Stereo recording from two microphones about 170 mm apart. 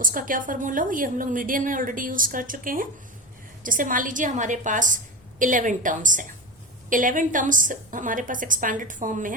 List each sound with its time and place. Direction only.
0.0 s a woman's voice: 55° right (ahead or behind)